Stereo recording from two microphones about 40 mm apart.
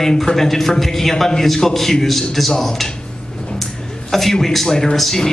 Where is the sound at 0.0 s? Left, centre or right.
Centre.